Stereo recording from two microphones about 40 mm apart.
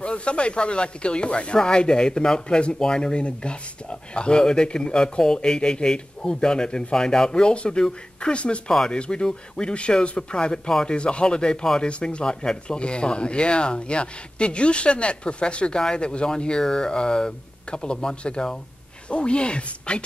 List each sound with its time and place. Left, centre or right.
0.0 s speech: left